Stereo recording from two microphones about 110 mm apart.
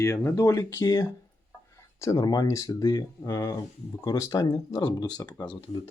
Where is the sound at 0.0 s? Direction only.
25° left (ahead or behind).